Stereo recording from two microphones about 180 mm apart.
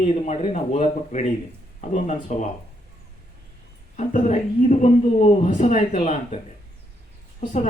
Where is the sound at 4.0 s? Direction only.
40° left (ahead or behind).